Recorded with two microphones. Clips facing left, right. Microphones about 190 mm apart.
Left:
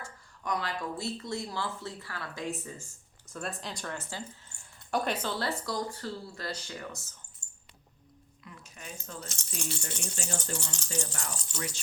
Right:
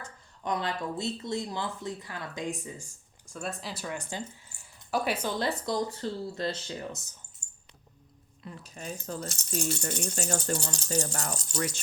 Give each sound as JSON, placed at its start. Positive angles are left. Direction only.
{"t": 0.0, "sound": "speech", "side_deg": -25}
{"t": 3.3, "sound": "speech", "side_deg": 0}
{"t": 8.4, "sound": "speech", "side_deg": -35}